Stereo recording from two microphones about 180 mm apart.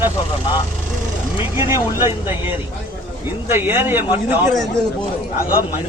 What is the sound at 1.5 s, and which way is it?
Speech, 15° right (ahead or behind).